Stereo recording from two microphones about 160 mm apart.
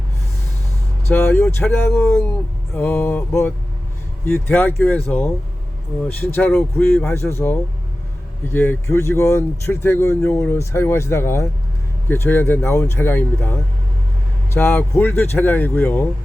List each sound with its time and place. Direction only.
1.1 s speech: 15° left (ahead or behind)